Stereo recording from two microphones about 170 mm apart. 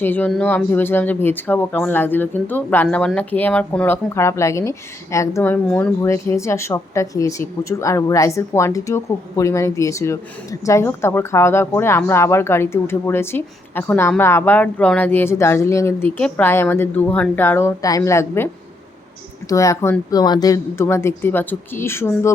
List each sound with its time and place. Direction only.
0.0 s speech: 10° left (ahead or behind)
19.5 s speech: 20° left (ahead or behind)